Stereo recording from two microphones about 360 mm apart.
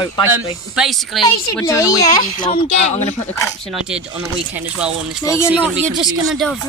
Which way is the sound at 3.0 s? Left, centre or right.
Centre.